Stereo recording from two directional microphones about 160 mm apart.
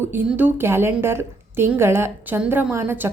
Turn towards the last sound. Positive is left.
turn(degrees=-15)  # may be behind; listen again after turning